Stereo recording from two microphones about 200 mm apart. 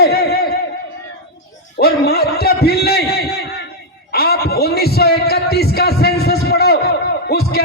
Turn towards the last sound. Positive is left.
turn(degrees=50)  # may be behind; listen again after turning